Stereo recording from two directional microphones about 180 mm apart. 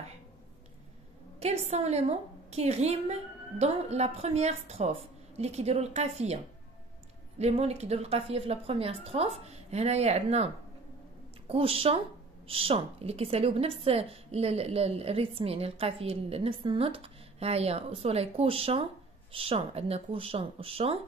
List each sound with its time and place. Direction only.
1.4 s a woman's voice: 35° right (ahead or behind)